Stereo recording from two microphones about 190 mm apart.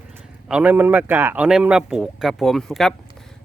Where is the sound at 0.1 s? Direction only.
5° right (ahead or behind).